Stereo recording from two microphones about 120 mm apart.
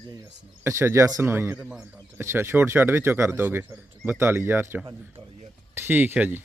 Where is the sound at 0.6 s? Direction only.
20° right (ahead or behind).